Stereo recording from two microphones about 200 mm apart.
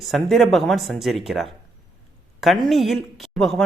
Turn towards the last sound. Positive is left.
turn(degrees=0)  # may be behind; listen again after turning